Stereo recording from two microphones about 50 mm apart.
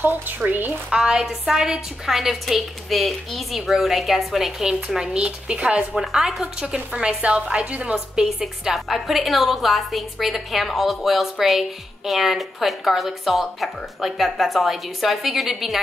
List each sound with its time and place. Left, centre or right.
0.0 s speech: right
0.8 s a woman's voice: centre
5.9 s a woman's voice: centre
7.0 s speech: right
7.9 s a woman's voice: centre